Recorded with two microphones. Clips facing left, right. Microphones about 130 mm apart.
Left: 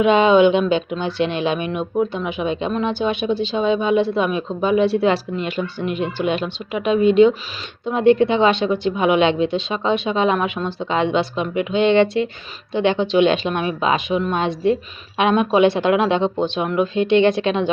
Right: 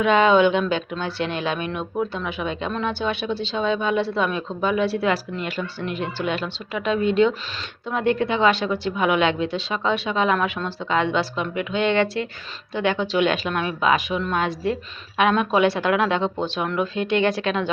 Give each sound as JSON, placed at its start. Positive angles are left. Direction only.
{"t": 0.0, "sound": "speech", "side_deg": 20}